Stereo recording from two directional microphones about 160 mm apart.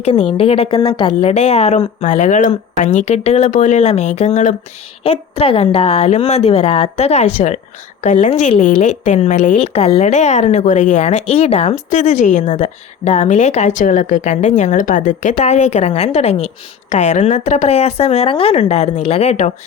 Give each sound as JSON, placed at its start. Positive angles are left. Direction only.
{"t": 0.0, "sound": "a woman's voice", "side_deg": 40}